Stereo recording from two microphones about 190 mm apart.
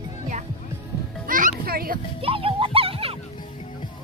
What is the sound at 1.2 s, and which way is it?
Music, 45° right (ahead or behind).